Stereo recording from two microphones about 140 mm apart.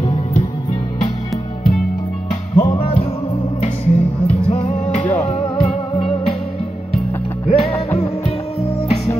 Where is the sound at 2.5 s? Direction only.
40° left (ahead or behind).